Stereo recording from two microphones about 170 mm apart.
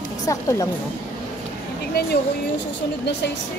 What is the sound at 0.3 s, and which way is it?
Speech, 20° left (ahead or behind).